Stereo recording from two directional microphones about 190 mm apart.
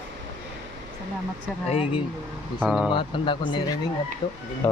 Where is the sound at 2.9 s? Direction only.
25° left (ahead or behind).